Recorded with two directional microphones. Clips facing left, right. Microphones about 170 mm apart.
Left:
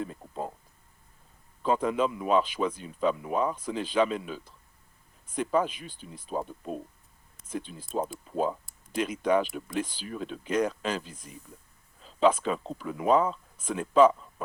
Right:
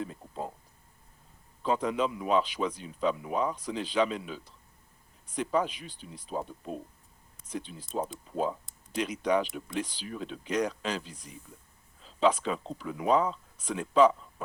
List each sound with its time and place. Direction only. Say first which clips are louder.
1.6 s speech: left 2 dB; 50° left (ahead or behind)
7.5 s speech: left 2 dB; 50° left (ahead or behind)